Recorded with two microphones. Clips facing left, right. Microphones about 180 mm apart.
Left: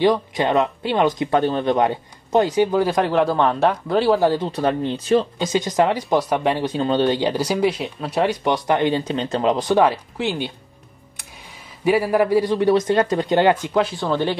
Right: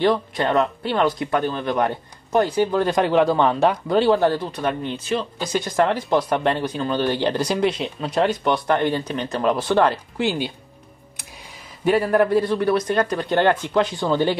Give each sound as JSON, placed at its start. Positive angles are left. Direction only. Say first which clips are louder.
{"t": 0.0, "sound": "speech", "louder": "left 2 dB", "side_deg": 15}
{"t": 4.5, "sound": "speech", "louder": "left 4 dB", "side_deg": 30}
{"t": 5.4, "sound": "speech", "louder": "left 2 dB", "side_deg": 20}
{"t": 6.6, "sound": "speech", "louder": "left 3 dB", "side_deg": 25}
{"t": 7.2, "sound": "speech", "louder": "left 1 dB", "side_deg": 10}
{"t": 8.5, "sound": "speech", "louder": "left 1 dB", "side_deg": 15}
{"t": 10.1, "sound": "speech", "louder": "right 1 dB", "side_deg": 0}